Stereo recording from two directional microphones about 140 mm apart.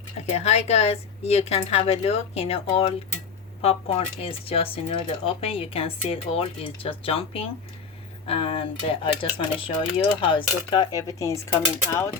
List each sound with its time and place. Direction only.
0.3 s speech: 50° left (ahead or behind); by 12.1 s 20° left (ahead or behind)